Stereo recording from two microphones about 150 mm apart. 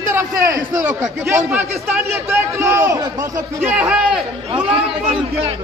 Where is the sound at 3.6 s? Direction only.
5° right (ahead or behind).